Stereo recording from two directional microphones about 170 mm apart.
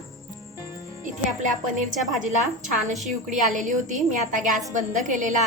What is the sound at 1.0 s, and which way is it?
A woman's voice, 50° right (ahead or behind).